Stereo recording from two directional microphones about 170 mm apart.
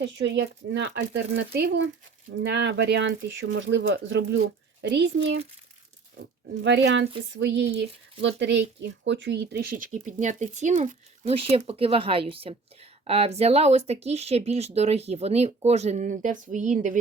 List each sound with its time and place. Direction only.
0.0 s speech: 90° right
1.3 s speech: 80° right
2.3 s speech: 90° right; by 9.8 s 65° right (ahead or behind)
9.9 s speech: 45° right (ahead or behind)